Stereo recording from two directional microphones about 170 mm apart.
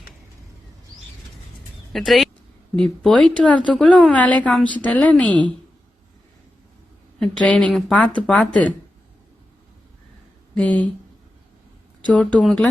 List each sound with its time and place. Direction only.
1.9 s speech: centre (ahead or behind)
7.2 s speech: 5° left (ahead or behind)
10.5 s speech: 5° left (ahead or behind)
12.1 s speech: 5° left (ahead or behind)